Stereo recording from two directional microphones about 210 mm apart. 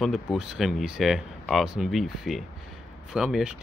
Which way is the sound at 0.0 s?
Centre (ahead or behind).